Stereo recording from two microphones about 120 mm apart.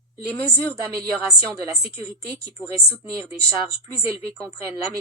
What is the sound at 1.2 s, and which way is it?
Speech, 25° right (ahead or behind).